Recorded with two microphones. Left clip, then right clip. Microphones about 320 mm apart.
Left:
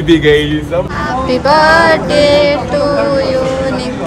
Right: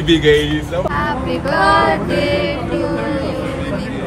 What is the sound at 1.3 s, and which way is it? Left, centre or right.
Music, left.